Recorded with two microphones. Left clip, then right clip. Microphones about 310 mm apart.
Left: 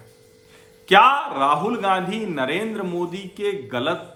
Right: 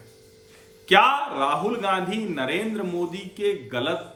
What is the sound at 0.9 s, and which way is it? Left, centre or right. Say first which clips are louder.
A man's voice: left 4 dB; centre.